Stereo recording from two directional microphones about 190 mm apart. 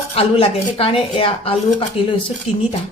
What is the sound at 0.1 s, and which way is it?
A woman's voice, 30° left (ahead or behind).